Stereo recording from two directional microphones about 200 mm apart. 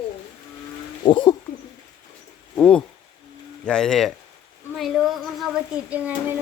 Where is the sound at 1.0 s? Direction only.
25° left (ahead or behind).